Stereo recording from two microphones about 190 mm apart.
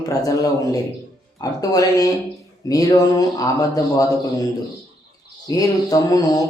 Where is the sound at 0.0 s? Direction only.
20° left (ahead or behind).